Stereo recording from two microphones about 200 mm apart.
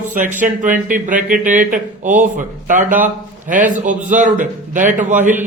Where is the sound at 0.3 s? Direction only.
40° right (ahead or behind).